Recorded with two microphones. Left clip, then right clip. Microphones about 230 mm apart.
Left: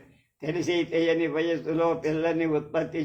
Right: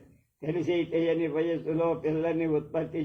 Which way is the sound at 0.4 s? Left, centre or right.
Left.